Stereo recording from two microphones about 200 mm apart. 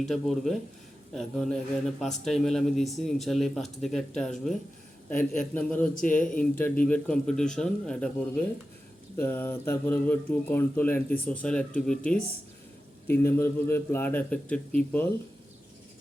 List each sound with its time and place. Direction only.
0.0 s speech: centre (ahead or behind)
5.1 s speech: 40° left (ahead or behind)
5.5 s speech: 10° left (ahead or behind)
5.9 s speech: 40° left (ahead or behind)
6.4 s speech: 5° left (ahead or behind)